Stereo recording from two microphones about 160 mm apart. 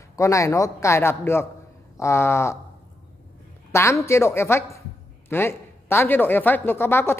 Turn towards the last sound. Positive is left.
turn(degrees=15)  # may be behind; listen again after turning